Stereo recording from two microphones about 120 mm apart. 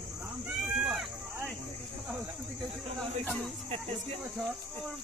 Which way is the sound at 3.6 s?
55° right (ahead or behind).